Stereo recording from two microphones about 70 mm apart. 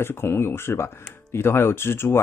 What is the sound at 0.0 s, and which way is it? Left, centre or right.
Speech, left.